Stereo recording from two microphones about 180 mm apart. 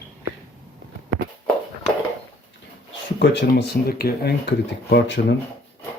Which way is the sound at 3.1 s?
75° left (ahead or behind).